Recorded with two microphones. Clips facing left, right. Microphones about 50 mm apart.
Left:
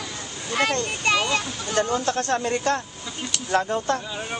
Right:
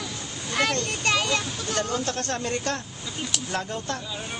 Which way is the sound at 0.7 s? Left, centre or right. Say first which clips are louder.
Left 2 dB; centre.